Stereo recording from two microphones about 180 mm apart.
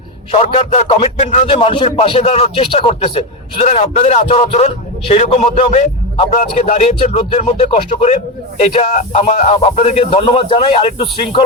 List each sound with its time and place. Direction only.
0.3 s a man's voice: 35° left (ahead or behind)